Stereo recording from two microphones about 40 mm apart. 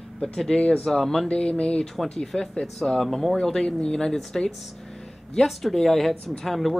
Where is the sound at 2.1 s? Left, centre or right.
Centre.